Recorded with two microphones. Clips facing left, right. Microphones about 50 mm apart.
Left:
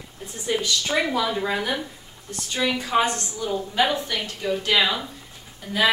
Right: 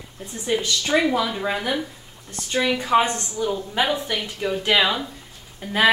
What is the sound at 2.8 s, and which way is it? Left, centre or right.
A woman's voice, right.